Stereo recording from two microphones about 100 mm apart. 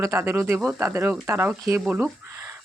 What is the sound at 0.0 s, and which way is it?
Speech, 30° right (ahead or behind).